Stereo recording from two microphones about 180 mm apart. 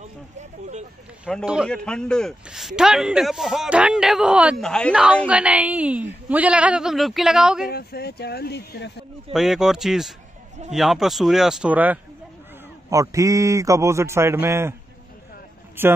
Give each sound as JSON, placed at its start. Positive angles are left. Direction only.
{"t": 0.0, "sound": "a sound", "side_deg": -40}
{"t": 1.2, "sound": "a man's voice", "side_deg": -5}
{"t": 5.0, "sound": "a woman's voice", "side_deg": -5}
{"t": 7.7, "sound": "speech", "side_deg": 60}
{"t": 9.3, "sound": "a man's voice", "side_deg": 0}
{"t": 15.8, "sound": "a woman's voice", "side_deg": -10}